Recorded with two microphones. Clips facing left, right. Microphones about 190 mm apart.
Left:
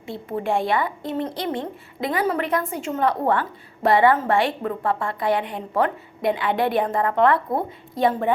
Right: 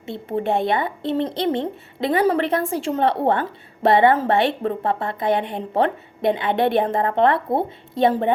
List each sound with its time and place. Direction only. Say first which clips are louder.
0.0 s a woman's voice: right 3 dB; 25° right (ahead or behind)